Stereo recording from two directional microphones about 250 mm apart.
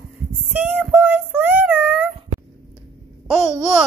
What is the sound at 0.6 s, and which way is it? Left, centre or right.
Child singing, centre.